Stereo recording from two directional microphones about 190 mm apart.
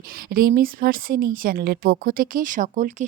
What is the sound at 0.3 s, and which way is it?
A woman's voice, 50° right (ahead or behind).